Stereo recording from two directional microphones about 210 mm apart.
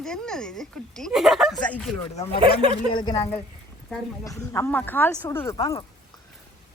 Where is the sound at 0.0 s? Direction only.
5° left (ahead or behind).